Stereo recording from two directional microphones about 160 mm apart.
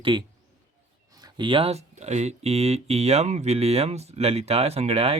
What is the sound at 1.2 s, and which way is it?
Speech, 30° right (ahead or behind).